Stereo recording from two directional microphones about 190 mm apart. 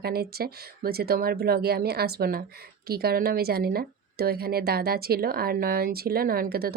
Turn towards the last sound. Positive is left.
turn(degrees=-55)  # may be behind; listen again after turning